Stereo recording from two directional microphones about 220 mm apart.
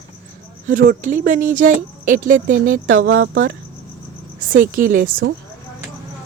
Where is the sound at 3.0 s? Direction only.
55° right (ahead or behind).